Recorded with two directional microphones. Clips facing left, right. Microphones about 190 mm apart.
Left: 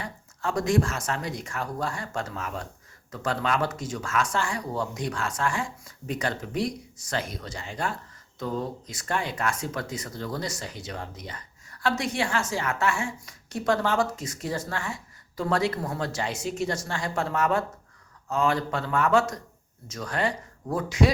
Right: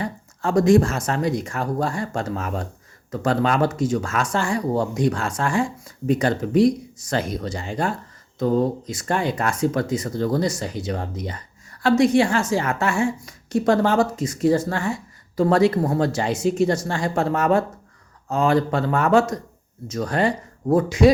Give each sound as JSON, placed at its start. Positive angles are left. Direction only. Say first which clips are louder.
{"t": 0.0, "sound": "speech", "louder": "right 6 dB", "side_deg": -40}